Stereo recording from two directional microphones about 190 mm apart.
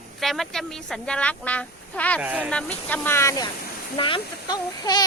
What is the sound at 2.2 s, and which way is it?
Speech, 10° right (ahead or behind).